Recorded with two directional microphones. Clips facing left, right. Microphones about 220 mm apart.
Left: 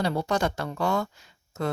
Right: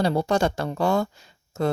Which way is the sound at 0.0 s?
30° right (ahead or behind).